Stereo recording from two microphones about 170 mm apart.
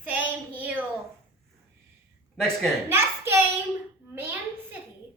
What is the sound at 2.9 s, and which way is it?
A woman's voice, 15° right (ahead or behind).